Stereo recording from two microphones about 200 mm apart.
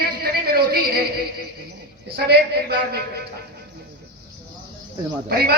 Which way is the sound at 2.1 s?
50° right (ahead or behind).